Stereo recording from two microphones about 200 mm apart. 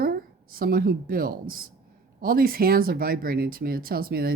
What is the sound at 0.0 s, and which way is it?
A woman's voice, 50° right (ahead or behind).